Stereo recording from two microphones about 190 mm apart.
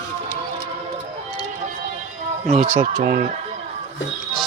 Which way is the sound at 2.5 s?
40° right (ahead or behind).